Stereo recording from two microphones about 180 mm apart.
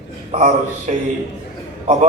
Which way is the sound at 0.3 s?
35° right (ahead or behind).